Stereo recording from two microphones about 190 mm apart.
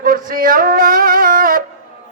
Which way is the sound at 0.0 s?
45° right (ahead or behind).